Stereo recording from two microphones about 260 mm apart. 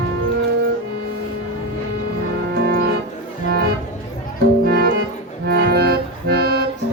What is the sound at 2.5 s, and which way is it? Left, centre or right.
Music, right.